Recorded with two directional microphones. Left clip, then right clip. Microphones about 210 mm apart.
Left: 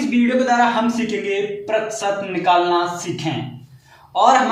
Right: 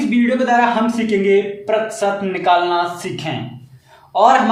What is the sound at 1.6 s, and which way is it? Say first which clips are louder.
Speech: right 3 dB; 45° right (ahead or behind).